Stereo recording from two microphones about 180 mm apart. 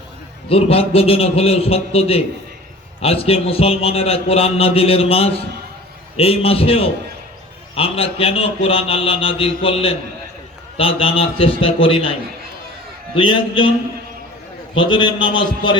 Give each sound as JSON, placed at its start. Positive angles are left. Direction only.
{"t": 0.4, "sound": "a man's voice", "side_deg": 30}
{"t": 13.1, "sound": "a man's voice", "side_deg": 30}
{"t": 14.8, "sound": "a man's voice", "side_deg": 25}